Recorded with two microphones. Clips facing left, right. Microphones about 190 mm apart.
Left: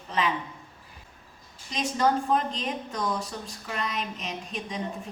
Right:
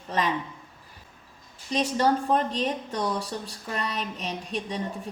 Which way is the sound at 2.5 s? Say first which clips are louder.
Right 4 dB; 35° right (ahead or behind).